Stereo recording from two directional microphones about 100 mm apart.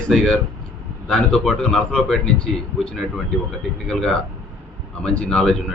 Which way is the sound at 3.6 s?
5° left (ahead or behind).